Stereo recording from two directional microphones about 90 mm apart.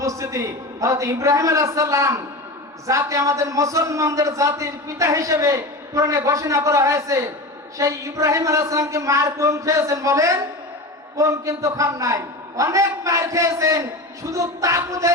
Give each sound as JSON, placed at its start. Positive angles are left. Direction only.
{"t": 0.0, "sound": "a man's voice", "side_deg": -35}